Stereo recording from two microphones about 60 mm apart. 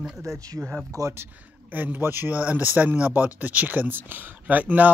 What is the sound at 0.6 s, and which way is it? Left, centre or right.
Speech, centre.